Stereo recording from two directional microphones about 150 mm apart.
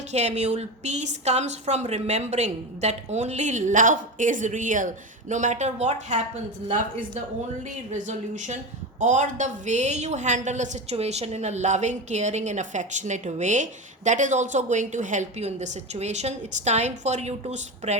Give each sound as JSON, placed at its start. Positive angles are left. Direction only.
{"t": 0.1, "sound": "a woman's voice", "side_deg": -50}